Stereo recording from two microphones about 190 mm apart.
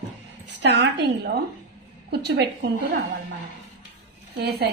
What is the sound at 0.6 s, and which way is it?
Speech, 65° right (ahead or behind).